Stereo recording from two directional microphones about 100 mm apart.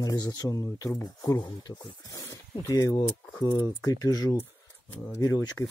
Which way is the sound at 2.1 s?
35° left (ahead or behind).